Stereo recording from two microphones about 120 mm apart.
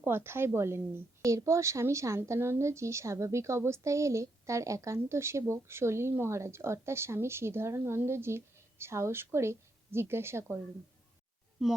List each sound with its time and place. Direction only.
0.0 s a woman's voice: 20° right (ahead or behind)